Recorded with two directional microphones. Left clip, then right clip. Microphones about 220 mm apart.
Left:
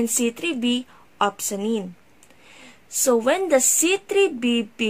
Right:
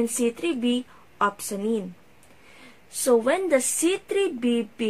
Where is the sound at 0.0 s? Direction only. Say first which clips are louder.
Left 1 dB; 40° left (ahead or behind).